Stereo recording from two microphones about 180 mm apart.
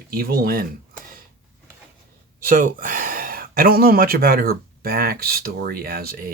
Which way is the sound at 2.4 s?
50° right (ahead or behind).